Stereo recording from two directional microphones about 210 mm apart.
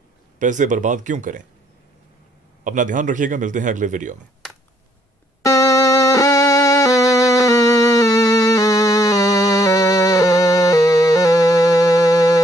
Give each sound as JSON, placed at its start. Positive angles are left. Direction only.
{"t": 0.4, "sound": "a man's voice", "side_deg": -35}
{"t": 2.6, "sound": "a man's voice", "side_deg": -40}
{"t": 5.4, "sound": "music", "side_deg": 15}